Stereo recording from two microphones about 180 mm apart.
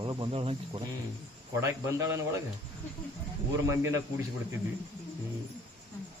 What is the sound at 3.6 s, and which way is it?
Speech, 15° right (ahead or behind).